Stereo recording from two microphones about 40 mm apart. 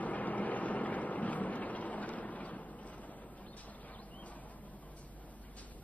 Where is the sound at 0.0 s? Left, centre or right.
Left.